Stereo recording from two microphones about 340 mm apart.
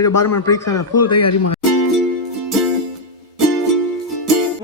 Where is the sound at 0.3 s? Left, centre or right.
Left.